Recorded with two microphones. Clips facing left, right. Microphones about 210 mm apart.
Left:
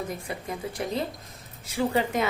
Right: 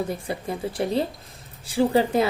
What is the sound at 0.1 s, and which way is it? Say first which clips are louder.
A woman's voice: right 5 dB; 30° right (ahead or behind).